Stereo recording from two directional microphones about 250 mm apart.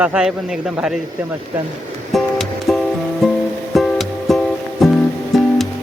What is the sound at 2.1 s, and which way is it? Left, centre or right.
Music, centre.